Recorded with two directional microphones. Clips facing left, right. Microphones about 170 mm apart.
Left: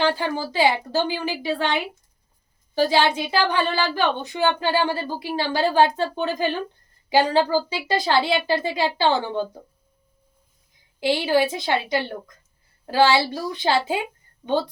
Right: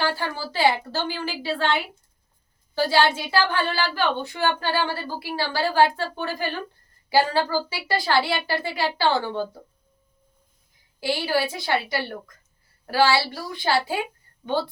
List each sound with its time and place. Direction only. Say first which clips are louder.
0.0 s a woman's voice: left 4 dB; 20° left (ahead or behind)
11.0 s a woman's voice: left 4 dB; 20° left (ahead or behind)